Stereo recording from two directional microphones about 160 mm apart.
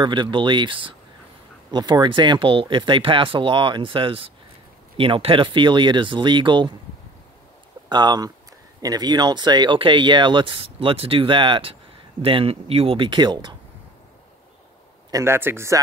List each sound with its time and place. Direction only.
0.0 s speech: 30° right (ahead or behind)
7.9 s speech: 25° right (ahead or behind)
15.0 s speech: 20° right (ahead or behind)